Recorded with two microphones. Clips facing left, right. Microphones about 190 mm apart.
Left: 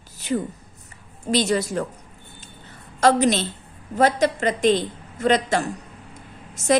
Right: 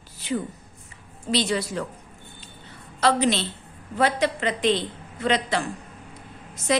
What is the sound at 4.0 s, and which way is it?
A woman's voice, 45° left (ahead or behind).